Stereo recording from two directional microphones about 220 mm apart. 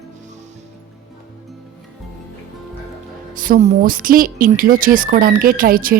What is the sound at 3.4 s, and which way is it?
Speech, 35° right (ahead or behind).